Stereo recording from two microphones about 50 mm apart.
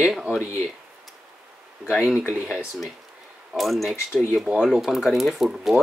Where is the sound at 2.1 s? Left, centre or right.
Right.